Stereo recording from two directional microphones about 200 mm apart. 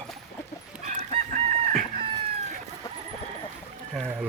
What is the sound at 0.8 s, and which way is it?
Chicken, 35° right (ahead or behind).